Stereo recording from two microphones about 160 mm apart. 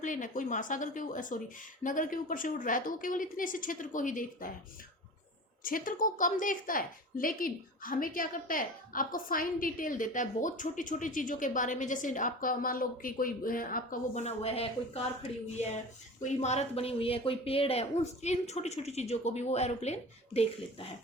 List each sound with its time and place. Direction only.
0.0 s a woman's voice: 55° left (ahead or behind)
5.6 s a woman's voice: 60° left (ahead or behind); by 15.0 s 40° left (ahead or behind)
16.4 s speech: 45° left (ahead or behind)